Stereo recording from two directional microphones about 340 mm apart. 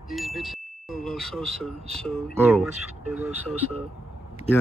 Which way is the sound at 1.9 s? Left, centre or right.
Centre.